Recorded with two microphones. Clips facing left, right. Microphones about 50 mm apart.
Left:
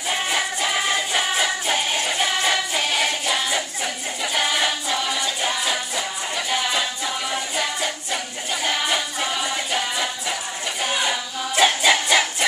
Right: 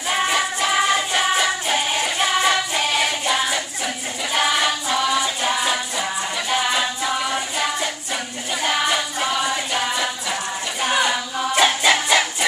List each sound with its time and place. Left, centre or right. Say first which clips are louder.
0.1 s music: right 4 dB; centre